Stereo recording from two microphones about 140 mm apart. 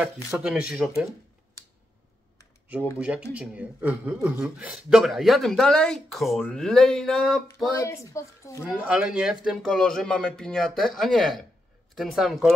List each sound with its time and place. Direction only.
0.3 s speech: 5° right (ahead or behind)
3.0 s speech: 10° right (ahead or behind)
7.4 s speech: 20° left (ahead or behind)
8.6 s speech: 5° right (ahead or behind)